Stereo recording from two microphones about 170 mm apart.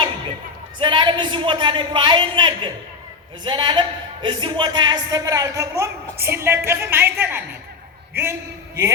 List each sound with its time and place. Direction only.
0.8 s a man's voice: 30° right (ahead or behind)